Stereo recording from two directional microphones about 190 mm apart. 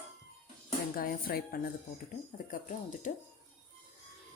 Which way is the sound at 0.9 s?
50° left (ahead or behind).